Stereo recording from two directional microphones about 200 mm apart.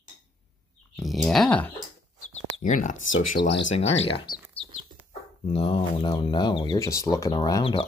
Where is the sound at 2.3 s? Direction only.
40° left (ahead or behind).